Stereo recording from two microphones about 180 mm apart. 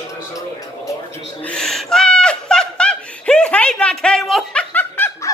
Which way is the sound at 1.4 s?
5° left (ahead or behind).